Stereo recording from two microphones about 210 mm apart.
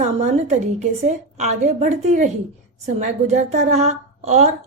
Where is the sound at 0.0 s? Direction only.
35° right (ahead or behind).